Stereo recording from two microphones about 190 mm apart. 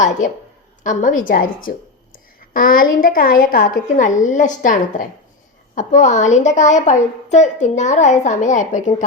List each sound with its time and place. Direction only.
0.0 s a woman's voice: 40° left (ahead or behind)